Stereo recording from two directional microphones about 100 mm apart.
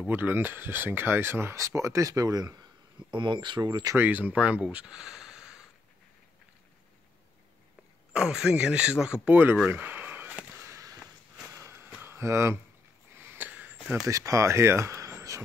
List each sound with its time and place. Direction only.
0.0 s speech: 20° right (ahead or behind); by 2.6 s 40° right (ahead or behind)
3.1 s speech: 50° right (ahead or behind)
3.9 s speech: 15° right (ahead or behind)
8.1 s speech: 5° right (ahead or behind)
9.7 s a sound: 20° right (ahead or behind)
10.7 s a sound: 35° right (ahead or behind); by 13.7 s 15° right (ahead or behind)
14.0 s speech: 30° right (ahead or behind)